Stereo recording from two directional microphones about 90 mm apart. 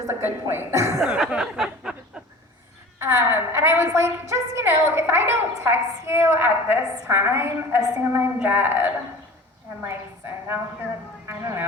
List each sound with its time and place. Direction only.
0.1 s a woman's voice: 25° right (ahead or behind)
0.9 s a sound: 10° right (ahead or behind)
3.0 s a woman's voice: 30° right (ahead or behind)